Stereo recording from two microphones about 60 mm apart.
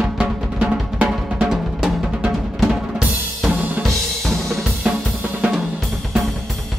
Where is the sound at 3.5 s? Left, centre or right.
Right.